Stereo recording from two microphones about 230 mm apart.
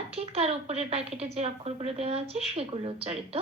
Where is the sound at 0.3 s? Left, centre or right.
Right.